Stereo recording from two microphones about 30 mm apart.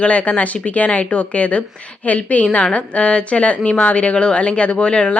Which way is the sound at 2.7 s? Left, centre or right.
Left.